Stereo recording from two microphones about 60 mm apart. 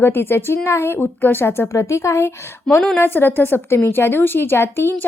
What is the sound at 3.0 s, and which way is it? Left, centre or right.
A woman's voice, left.